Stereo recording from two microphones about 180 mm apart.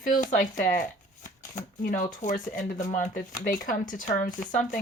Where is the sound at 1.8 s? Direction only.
45° left (ahead or behind).